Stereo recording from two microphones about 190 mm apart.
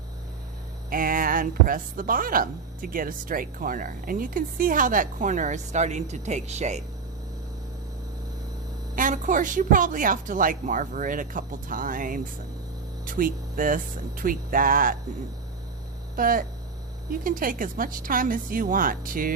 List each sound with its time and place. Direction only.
0.9 s speech: 45° right (ahead or behind)
9.0 s speech: 45° right (ahead or behind)
16.1 s speech: 45° right (ahead or behind)